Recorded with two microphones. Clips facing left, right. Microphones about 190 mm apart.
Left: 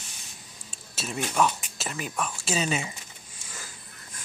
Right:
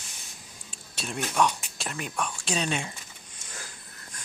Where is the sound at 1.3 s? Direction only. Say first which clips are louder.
Even; 5° left (ahead or behind).